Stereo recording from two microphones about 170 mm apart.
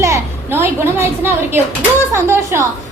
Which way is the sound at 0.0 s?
15° right (ahead or behind).